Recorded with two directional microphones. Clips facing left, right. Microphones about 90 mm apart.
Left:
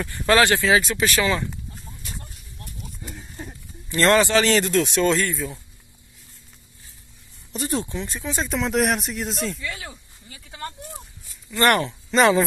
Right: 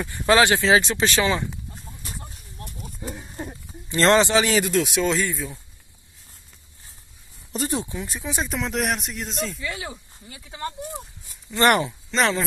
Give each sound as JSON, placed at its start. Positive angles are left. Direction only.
{"t": 0.0, "sound": "speech", "side_deg": -20}
{"t": 3.3, "sound": "speech", "side_deg": -25}
{"t": 7.8, "sound": "speech", "side_deg": -10}
{"t": 8.5, "sound": "speech", "side_deg": 0}
{"t": 11.5, "sound": "speech", "side_deg": -20}
{"t": 12.1, "sound": "speech", "side_deg": 5}